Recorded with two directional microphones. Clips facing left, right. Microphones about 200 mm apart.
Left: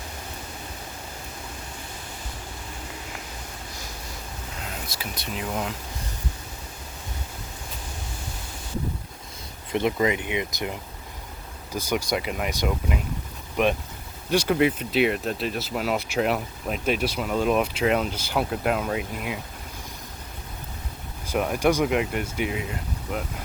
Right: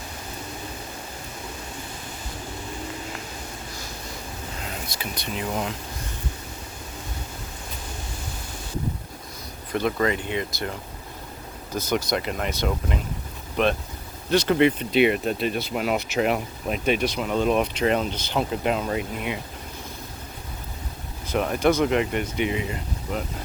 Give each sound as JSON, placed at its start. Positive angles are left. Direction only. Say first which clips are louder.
{"t": 4.6, "sound": "speech", "louder": "right 1 dB", "side_deg": 5}
{"t": 9.7, "sound": "speech", "louder": "even", "side_deg": 20}
{"t": 21.3, "sound": "speech", "louder": "right 1 dB", "side_deg": 5}